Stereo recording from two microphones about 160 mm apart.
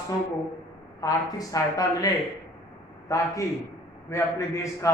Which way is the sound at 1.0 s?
20° left (ahead or behind).